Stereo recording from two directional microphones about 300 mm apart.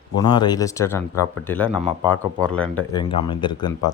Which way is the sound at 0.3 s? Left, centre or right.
Centre.